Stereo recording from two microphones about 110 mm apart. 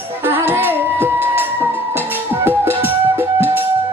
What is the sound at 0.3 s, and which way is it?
Music, 20° right (ahead or behind).